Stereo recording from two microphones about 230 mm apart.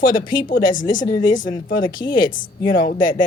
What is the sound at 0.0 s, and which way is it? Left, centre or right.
Speech, left.